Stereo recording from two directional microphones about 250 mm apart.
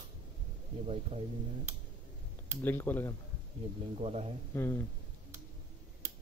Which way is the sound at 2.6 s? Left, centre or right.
Centre.